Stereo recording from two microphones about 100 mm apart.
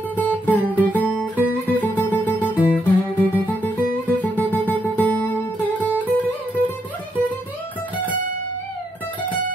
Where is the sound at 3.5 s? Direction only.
20° left (ahead or behind).